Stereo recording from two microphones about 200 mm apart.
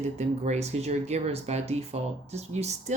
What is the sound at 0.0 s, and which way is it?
Speech, 35° right (ahead or behind).